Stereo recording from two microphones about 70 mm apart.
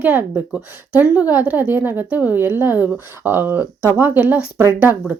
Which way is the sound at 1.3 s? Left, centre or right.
Right.